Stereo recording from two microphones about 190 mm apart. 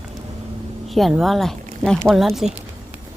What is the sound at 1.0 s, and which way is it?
Speech, centre (ahead or behind).